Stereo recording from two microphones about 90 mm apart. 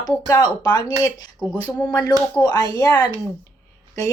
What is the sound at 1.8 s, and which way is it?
A woman's voice, 45° left (ahead or behind).